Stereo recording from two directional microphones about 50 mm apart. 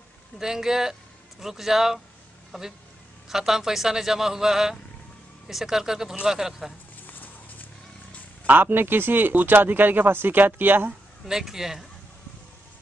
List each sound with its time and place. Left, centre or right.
0.4 s a man's voice: centre
8.5 s speech: right
11.2 s a man's voice: centre